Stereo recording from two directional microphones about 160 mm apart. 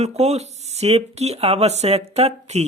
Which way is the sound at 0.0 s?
40° right (ahead or behind).